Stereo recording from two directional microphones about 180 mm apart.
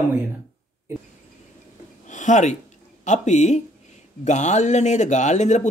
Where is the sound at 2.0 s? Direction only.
45° left (ahead or behind).